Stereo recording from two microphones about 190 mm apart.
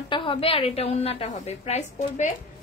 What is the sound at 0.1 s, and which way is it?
A woman's voice, 25° left (ahead or behind).